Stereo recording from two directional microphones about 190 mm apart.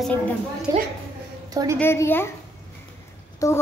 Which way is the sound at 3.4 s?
15° left (ahead or behind).